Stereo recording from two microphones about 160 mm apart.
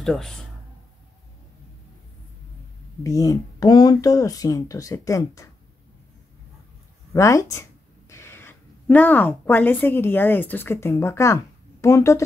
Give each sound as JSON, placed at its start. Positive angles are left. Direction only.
{"t": 0.0, "sound": "speech", "side_deg": 0}
{"t": 3.0, "sound": "speech", "side_deg": 20}
{"t": 7.1, "sound": "speech", "side_deg": 20}